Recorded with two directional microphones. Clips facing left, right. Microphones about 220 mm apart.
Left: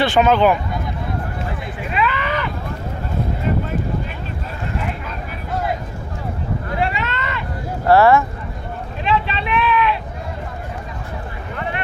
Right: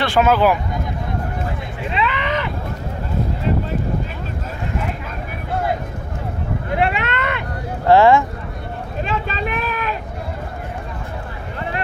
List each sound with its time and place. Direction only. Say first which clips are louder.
0.0 s speech: left 1 dB; centre (ahead or behind)
1.9 s a sound: even; 20° right (ahead or behind)
6.7 s boat: right 4 dB; 60° right (ahead or behind)
7.9 s speech: right 1 dB; 15° right (ahead or behind)
9.0 s vehicle: left 4 dB; 45° right (ahead or behind)